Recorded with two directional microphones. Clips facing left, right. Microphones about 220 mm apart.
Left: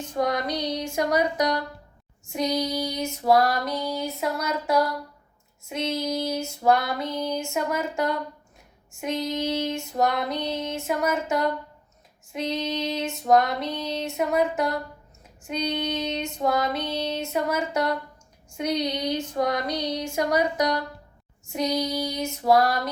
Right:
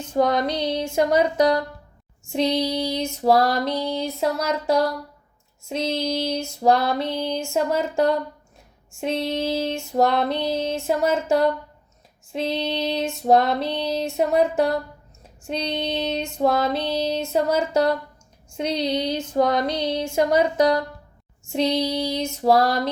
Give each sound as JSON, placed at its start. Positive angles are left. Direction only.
{"t": 0.1, "sound": "female singing", "side_deg": -30}